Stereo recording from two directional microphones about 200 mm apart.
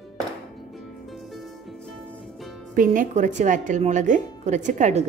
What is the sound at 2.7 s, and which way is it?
Speech, 40° right (ahead or behind).